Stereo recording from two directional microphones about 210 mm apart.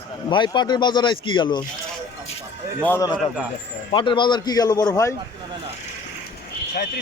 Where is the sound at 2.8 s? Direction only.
15° left (ahead or behind).